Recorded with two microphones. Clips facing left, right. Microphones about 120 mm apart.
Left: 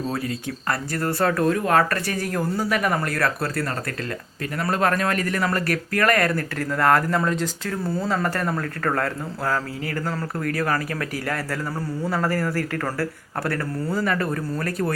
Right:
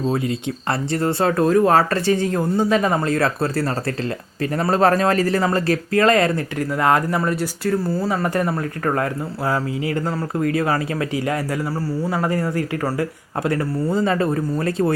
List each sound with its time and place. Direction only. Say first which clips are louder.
0.1 s speech: right 5 dB; 25° right (ahead or behind)
4.5 s speech: right 5 dB; 30° right (ahead or behind)
12.0 s speech: even; 15° right (ahead or behind)